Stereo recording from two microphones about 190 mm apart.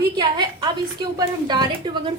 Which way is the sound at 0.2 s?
25° right (ahead or behind).